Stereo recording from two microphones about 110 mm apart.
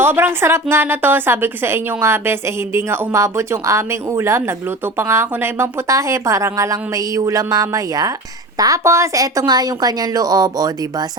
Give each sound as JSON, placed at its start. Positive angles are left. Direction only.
{"t": 0.0, "sound": "a woman's voice", "side_deg": -20}